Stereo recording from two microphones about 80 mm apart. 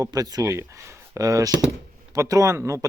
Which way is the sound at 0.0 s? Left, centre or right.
Right.